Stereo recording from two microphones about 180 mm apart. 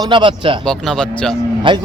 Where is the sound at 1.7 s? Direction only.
30° right (ahead or behind).